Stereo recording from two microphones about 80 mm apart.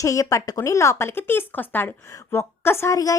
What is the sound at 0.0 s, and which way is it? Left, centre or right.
A woman's voice, left.